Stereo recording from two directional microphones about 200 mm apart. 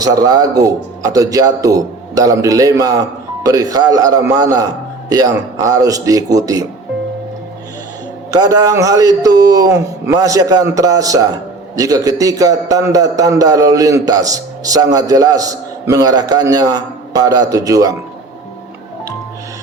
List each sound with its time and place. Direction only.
0.0 s a man's voice: 20° right (ahead or behind)
8.3 s a man's voice: 15° right (ahead or behind)